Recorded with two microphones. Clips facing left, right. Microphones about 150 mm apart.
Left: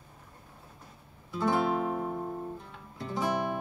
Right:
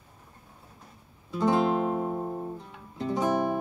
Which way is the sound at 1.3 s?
20° right (ahead or behind).